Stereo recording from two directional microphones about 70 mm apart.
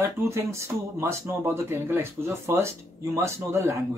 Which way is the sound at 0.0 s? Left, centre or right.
Right.